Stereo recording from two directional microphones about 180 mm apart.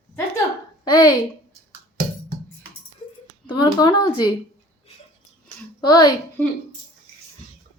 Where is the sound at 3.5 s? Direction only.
25° left (ahead or behind).